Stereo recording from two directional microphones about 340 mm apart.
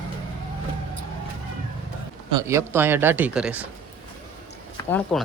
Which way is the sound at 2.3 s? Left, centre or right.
Centre.